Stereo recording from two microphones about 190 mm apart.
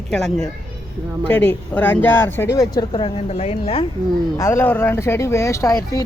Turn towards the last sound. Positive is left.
turn(degrees=20)  # may be behind; listen again after turning